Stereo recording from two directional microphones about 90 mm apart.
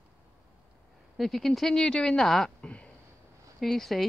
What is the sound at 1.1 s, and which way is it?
Speech, centre (ahead or behind).